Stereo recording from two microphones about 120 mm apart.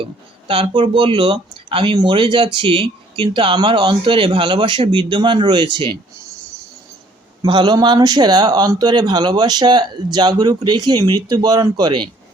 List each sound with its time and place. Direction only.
0.0 s speech: 50° right (ahead or behind)
7.4 s speech: 40° right (ahead or behind)